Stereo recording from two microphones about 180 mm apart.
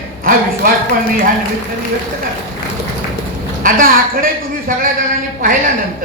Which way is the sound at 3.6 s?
50° right (ahead or behind).